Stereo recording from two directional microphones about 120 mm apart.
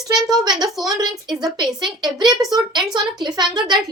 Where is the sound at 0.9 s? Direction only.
35° right (ahead or behind).